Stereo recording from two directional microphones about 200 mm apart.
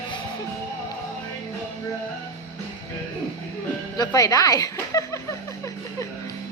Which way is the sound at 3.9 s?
20° left (ahead or behind).